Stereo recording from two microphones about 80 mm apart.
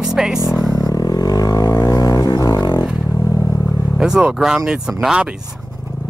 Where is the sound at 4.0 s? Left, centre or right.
Centre.